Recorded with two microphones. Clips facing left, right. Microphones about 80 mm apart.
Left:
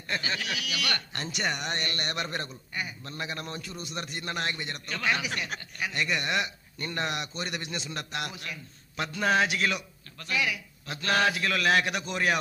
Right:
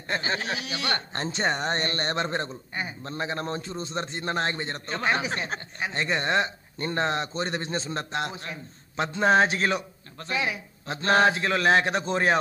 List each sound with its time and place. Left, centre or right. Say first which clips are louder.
0.1 s a man's voice: right 4 dB; right